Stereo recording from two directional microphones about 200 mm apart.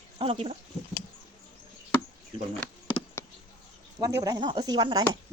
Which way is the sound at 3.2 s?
15° left (ahead or behind).